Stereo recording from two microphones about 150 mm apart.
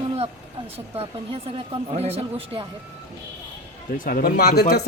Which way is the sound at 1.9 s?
45° right (ahead or behind).